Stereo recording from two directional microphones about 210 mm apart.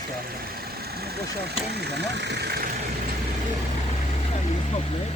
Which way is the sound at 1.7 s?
55° right (ahead or behind).